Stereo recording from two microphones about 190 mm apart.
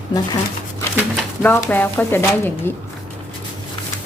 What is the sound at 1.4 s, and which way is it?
A woman's voice, 10° left (ahead or behind).